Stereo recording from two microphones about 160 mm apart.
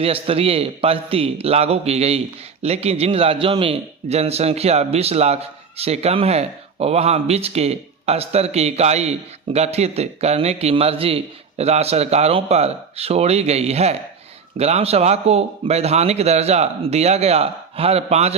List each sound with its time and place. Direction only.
0.0 s a man's voice: 35° right (ahead or behind)